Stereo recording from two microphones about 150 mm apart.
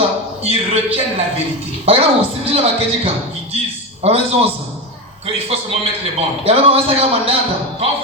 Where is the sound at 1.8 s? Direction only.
40° right (ahead or behind).